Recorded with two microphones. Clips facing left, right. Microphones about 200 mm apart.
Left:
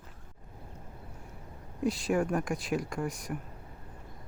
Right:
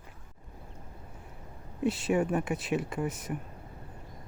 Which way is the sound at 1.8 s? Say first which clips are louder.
Right 1 dB; 5° right (ahead or behind).